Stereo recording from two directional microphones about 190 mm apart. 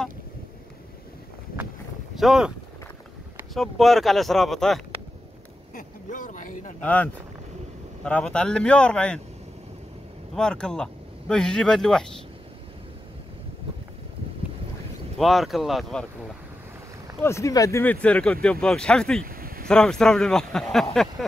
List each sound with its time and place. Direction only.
2.1 s speech: centre (ahead or behind)
3.5 s speech: centre (ahead or behind)
5.8 s a sound: 45° left (ahead or behind)
6.8 s speech: 10° left (ahead or behind)
10.3 s speech: 5° left (ahead or behind)
15.1 s speech: centre (ahead or behind)
17.2 s speech: 15° left (ahead or behind)
19.2 s a sound: 50° right (ahead or behind)
19.7 s speech: 5° left (ahead or behind)